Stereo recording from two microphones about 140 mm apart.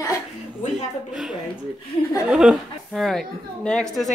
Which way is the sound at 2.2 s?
5° right (ahead or behind).